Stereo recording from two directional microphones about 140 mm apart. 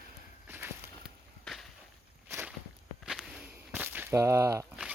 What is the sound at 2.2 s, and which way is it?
Walk, 15° right (ahead or behind).